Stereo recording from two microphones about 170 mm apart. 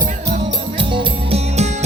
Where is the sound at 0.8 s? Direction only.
30° right (ahead or behind).